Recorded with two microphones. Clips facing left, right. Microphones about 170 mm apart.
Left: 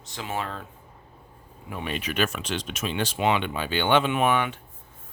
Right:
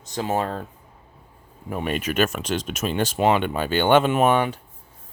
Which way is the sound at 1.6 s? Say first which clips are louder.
Right 6 dB; 45° right (ahead or behind).